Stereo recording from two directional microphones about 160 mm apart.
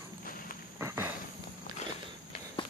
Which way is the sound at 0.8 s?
15° right (ahead or behind).